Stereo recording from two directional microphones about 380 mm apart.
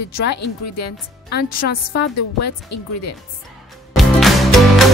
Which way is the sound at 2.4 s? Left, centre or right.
Left.